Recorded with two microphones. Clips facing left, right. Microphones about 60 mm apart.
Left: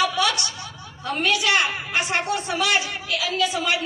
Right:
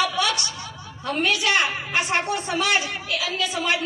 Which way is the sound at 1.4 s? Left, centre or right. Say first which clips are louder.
Even; right.